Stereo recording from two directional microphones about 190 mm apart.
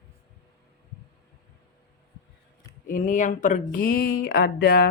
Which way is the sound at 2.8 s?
45° left (ahead or behind).